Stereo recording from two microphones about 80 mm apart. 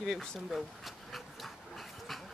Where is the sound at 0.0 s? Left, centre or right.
Centre.